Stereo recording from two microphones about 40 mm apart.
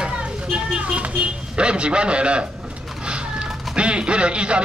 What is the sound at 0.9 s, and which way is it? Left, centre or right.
Speech, right.